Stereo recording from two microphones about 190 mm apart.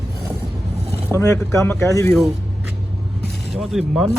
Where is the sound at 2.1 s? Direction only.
Centre (ahead or behind).